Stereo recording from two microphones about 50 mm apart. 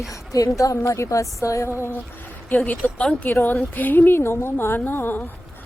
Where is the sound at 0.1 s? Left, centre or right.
Left.